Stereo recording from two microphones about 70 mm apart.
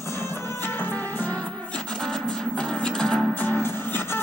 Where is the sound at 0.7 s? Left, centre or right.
Left.